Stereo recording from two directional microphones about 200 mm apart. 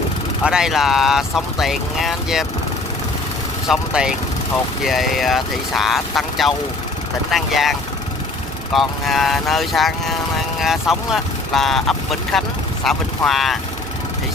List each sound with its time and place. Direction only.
0.4 s speech: 5° right (ahead or behind)
3.6 s speech: 5° right (ahead or behind)
8.7 s speech: centre (ahead or behind)